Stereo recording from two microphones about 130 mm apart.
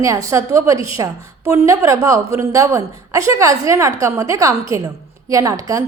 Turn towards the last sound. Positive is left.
turn(degrees=-25)  # may be behind; listen again after turning